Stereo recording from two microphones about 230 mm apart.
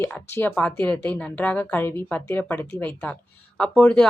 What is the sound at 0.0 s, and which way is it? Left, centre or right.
A woman's voice, centre.